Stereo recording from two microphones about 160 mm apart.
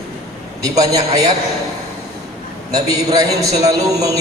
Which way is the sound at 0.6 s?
20° right (ahead or behind).